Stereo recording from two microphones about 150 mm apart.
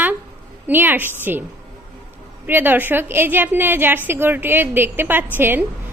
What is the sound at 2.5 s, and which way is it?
A woman's voice, 15° right (ahead or behind).